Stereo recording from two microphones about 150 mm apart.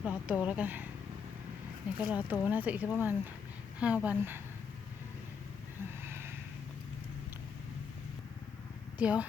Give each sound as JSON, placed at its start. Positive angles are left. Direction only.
{"t": 0.0, "sound": "speech", "side_deg": -10}
{"t": 2.0, "sound": "speech", "side_deg": -10}
{"t": 6.0, "sound": "vehicle", "side_deg": -15}
{"t": 9.0, "sound": "speech", "side_deg": -10}